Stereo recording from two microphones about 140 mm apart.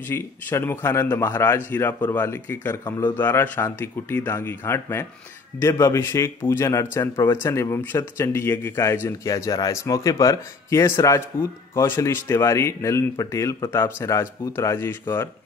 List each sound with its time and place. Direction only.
0.1 s a man's voice: 15° left (ahead or behind)